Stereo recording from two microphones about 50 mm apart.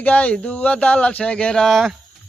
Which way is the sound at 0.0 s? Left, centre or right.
Left.